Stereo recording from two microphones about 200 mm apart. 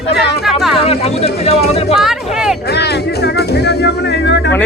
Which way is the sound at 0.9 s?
30° left (ahead or behind).